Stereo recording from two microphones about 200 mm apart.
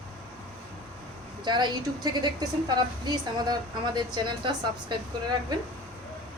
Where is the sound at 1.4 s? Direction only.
20° right (ahead or behind).